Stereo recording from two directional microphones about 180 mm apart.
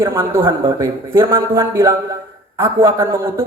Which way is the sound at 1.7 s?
15° right (ahead or behind).